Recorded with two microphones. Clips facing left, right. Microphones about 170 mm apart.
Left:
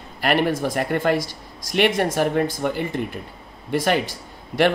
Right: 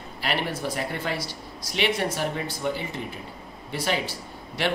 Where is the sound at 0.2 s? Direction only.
50° left (ahead or behind).